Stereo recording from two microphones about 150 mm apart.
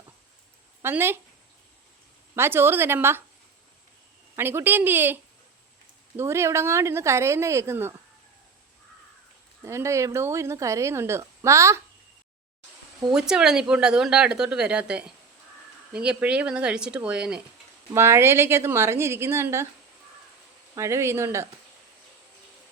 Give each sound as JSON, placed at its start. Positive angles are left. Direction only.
{"t": 0.8, "sound": "speech", "side_deg": -15}
{"t": 2.3, "sound": "speech", "side_deg": -15}
{"t": 4.4, "sound": "speech", "side_deg": -15}
{"t": 9.6, "sound": "a woman's voice", "side_deg": -20}
{"t": 13.1, "sound": "speech", "side_deg": -5}
{"t": 17.9, "sound": "speech", "side_deg": -15}
{"t": 20.7, "sound": "speech", "side_deg": -20}